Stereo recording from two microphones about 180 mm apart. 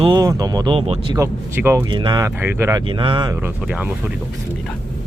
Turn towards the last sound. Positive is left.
turn(degrees=-5)  # may be behind; listen again after turning